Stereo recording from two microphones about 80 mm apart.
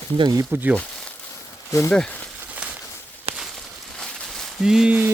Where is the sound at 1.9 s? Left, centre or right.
Centre.